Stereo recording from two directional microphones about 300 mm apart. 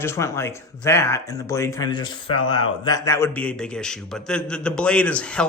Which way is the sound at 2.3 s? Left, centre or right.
Left.